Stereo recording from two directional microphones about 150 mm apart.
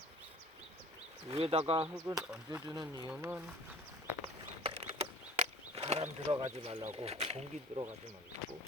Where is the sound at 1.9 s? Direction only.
20° right (ahead or behind).